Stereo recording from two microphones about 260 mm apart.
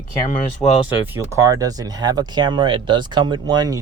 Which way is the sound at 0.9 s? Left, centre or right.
Centre.